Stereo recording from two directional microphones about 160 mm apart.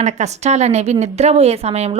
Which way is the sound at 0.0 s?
45° right (ahead or behind).